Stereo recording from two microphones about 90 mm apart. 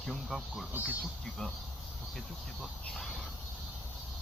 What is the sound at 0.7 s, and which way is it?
Speech, 15° right (ahead or behind).